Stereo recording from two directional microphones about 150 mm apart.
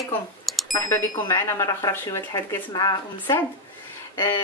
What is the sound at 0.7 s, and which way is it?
Speech, 25° left (ahead or behind).